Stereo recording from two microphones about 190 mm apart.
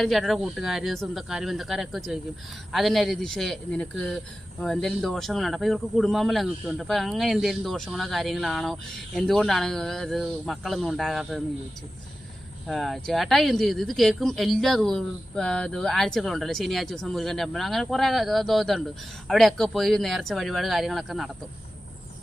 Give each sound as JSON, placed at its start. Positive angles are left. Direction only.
{"t": 0.0, "sound": "speech", "side_deg": 0}
{"t": 12.6, "sound": "speech", "side_deg": 0}